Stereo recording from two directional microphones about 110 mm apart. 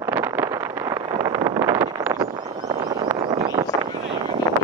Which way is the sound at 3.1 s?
30° right (ahead or behind).